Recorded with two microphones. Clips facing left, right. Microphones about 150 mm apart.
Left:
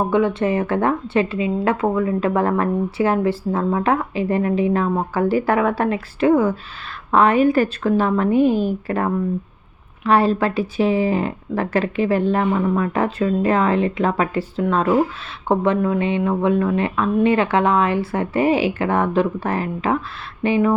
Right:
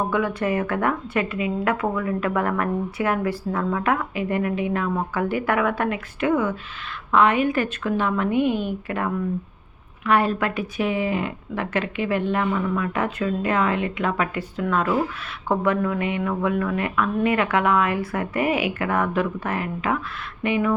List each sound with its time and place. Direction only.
0.1 s a woman's voice: 25° left (ahead or behind)